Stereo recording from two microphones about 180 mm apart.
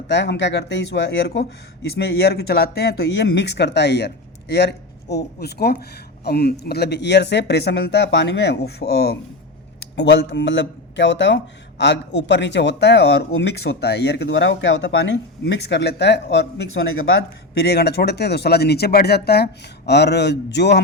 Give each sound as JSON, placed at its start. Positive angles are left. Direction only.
{"t": 0.1, "sound": "speech", "side_deg": 70}